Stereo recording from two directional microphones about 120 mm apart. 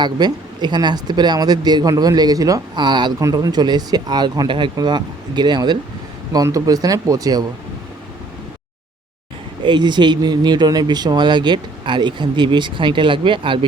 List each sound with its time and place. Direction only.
0.0 s speech: 35° right (ahead or behind)
9.6 s speech: 40° right (ahead or behind)